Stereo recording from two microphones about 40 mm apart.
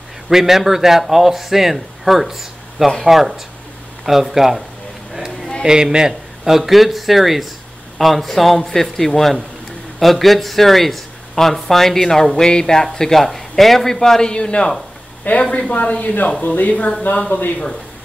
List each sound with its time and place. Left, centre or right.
0.3 s a man's voice: centre
5.6 s a man's voice: centre
14.3 s a man's voice: left
15.3 s speech: left